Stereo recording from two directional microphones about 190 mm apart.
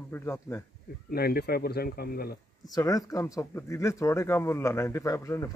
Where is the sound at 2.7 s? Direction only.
20° left (ahead or behind).